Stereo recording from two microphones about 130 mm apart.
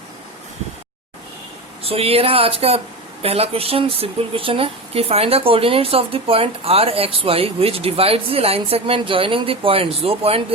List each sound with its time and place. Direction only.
1.8 s speech: 50° right (ahead or behind)